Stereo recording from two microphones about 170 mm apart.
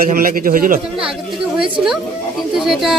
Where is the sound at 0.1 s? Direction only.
55° right (ahead or behind).